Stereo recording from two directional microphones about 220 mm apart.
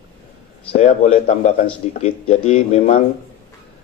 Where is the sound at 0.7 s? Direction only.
30° left (ahead or behind).